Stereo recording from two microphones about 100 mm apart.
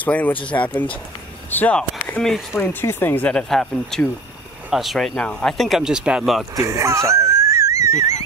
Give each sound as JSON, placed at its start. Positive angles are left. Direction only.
{"t": 0.0, "sound": "speech", "side_deg": 15}
{"t": 1.8, "sound": "a sound", "side_deg": 10}
{"t": 2.5, "sound": "speech", "side_deg": 25}
{"t": 6.5, "sound": "wheeze", "side_deg": -30}